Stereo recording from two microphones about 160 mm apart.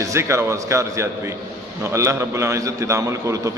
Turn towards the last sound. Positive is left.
turn(degrees=-20)  # may be behind; listen again after turning